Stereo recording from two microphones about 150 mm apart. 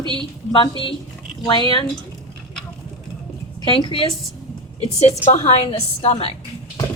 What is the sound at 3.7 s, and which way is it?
Speech, 35° left (ahead or behind).